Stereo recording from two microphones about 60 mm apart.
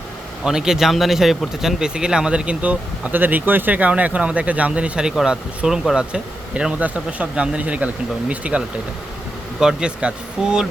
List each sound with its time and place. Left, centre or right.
0.4 s speech: centre